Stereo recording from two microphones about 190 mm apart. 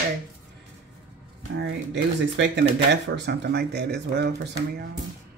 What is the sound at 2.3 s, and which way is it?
Speech, 65° right (ahead or behind).